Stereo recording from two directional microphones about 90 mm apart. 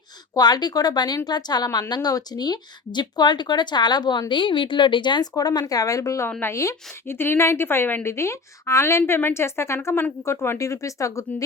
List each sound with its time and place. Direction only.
0.3 s speech: 50° left (ahead or behind)
5.3 s a woman's voice: 45° left (ahead or behind)